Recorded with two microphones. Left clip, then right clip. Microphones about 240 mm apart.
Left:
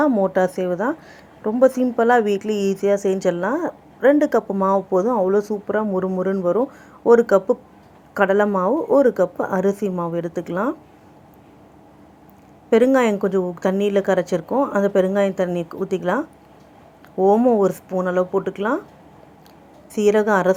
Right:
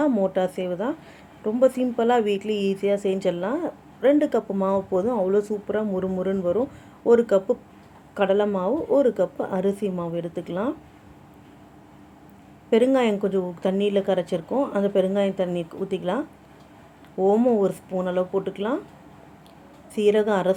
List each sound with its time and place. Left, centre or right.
0.0 s a woman's voice: centre
12.7 s a woman's voice: centre
19.9 s a woman's voice: centre